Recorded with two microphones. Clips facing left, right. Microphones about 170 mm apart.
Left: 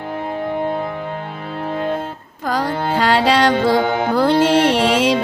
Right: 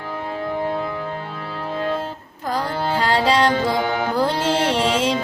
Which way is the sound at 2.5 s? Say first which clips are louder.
Left 3 dB; 75° left (ahead or behind).